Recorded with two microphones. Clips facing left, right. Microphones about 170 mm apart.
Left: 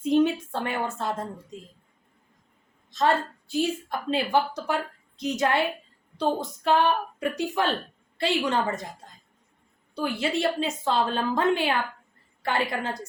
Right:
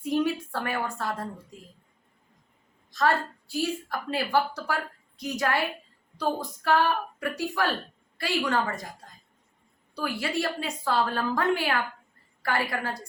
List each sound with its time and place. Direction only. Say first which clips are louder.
0.0 s a woman's voice: left 5 dB; 20° left (ahead or behind)
2.9 s a woman's voice: left 2 dB; 20° left (ahead or behind)
9.9 s a woman's voice: left 3 dB; 20° left (ahead or behind)